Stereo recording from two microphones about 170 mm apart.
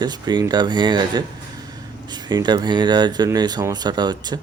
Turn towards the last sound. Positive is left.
turn(degrees=-25)  # may be behind; listen again after turning